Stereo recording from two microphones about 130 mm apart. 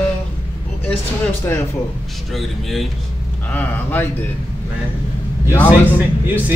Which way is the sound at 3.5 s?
15° left (ahead or behind).